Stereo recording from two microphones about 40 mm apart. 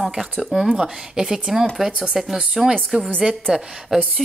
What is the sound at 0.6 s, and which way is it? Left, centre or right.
Speech, centre.